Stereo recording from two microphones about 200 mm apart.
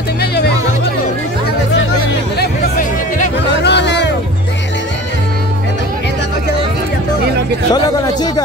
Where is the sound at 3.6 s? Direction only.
60° left (ahead or behind).